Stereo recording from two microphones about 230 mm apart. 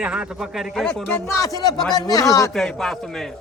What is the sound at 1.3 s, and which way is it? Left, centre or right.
A man's voice, centre.